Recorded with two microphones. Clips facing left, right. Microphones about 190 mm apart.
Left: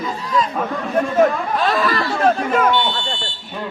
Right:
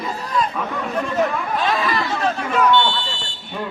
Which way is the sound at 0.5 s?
50° left (ahead or behind).